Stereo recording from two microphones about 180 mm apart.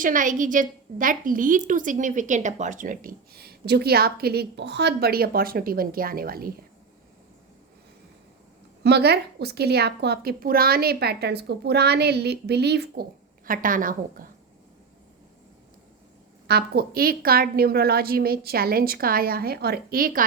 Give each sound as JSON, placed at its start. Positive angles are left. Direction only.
{"t": 0.0, "sound": "a woman's voice", "side_deg": -45}
{"t": 8.8, "sound": "a woman's voice", "side_deg": -65}
{"t": 16.5, "sound": "a woman's voice", "side_deg": -60}